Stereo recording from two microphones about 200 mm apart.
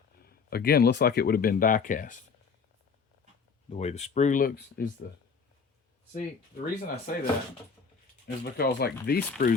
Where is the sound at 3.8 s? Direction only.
35° left (ahead or behind).